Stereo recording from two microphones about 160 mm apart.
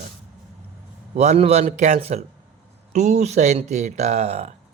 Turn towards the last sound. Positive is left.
turn(degrees=-45)  # may be behind; listen again after turning